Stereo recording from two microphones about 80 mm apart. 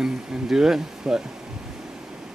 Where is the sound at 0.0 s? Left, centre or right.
Centre.